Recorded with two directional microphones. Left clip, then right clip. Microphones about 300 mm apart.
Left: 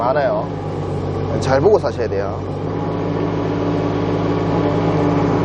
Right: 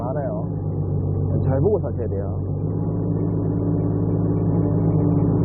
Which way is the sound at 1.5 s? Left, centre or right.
Centre.